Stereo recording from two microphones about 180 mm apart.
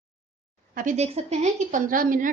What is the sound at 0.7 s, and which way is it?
A woman's voice, 40° right (ahead or behind).